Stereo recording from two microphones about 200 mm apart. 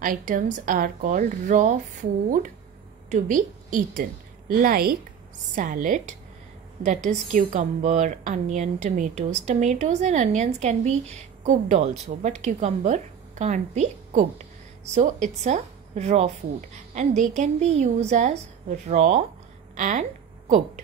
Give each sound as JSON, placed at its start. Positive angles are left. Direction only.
{"t": 0.0, "sound": "a woman's voice", "side_deg": -40}